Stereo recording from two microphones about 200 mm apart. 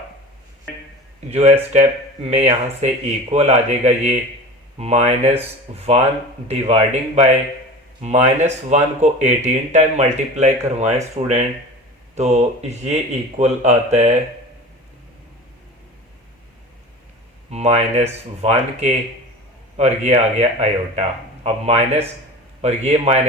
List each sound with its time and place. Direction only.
1.3 s speech: 30° right (ahead or behind)
12.1 s speech: 35° right (ahead or behind)
17.5 s speech: 35° right (ahead or behind)